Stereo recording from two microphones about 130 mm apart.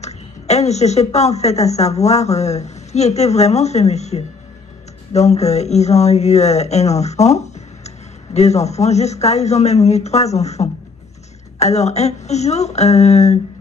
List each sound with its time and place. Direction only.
0.0 s a woman's voice: 60° left (ahead or behind)